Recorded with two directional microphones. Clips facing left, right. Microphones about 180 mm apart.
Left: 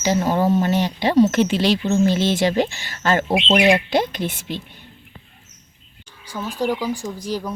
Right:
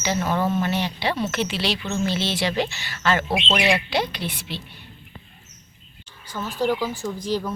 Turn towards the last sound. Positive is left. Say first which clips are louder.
# right 1 dB
turn(degrees=10)  # may be behind; listen again after turning